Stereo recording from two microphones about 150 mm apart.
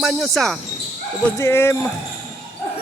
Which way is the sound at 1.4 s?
15° left (ahead or behind).